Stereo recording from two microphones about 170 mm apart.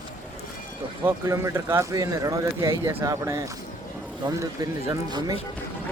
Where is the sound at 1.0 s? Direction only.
15° right (ahead or behind).